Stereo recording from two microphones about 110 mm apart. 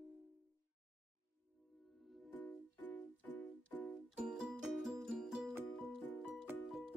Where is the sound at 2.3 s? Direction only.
15° left (ahead or behind).